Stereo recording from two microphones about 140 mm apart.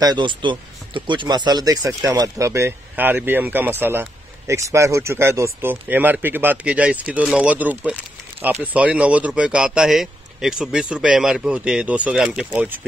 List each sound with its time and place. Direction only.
0.0 s speech: 35° right (ahead or behind); by 12.6 s 5° right (ahead or behind)